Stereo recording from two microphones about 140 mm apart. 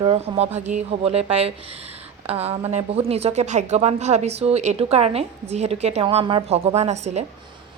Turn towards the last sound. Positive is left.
turn(degrees=-55)  # may be behind; listen again after turning